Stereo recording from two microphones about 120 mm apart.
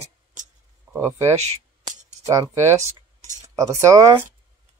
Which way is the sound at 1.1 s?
25° right (ahead or behind).